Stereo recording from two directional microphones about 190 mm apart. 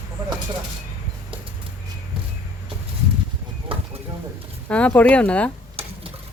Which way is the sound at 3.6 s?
30° right (ahead or behind).